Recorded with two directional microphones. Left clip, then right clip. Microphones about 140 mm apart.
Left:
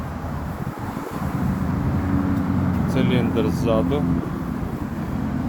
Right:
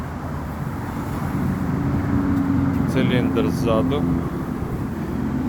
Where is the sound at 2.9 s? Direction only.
20° left (ahead or behind).